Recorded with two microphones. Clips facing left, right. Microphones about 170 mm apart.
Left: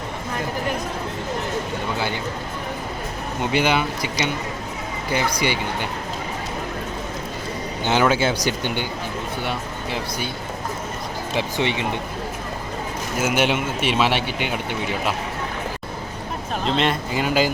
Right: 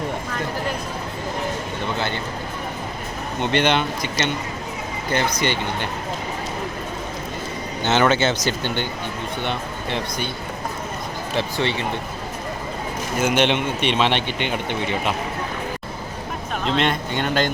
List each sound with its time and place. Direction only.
3.4 s speech: 5° left (ahead or behind)
7.9 s speech: 10° left (ahead or behind)
11.3 s speech: 15° left (ahead or behind)
13.1 s speech: 5° left (ahead or behind)
16.6 s speech: centre (ahead or behind)